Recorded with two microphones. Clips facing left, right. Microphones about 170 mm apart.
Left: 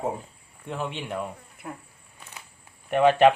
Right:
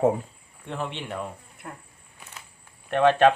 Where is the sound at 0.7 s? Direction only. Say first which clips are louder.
Left 1 dB; 5° left (ahead or behind).